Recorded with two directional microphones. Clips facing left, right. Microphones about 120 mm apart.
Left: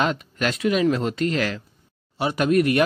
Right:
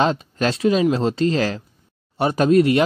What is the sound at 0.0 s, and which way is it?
Speech, 30° right (ahead or behind).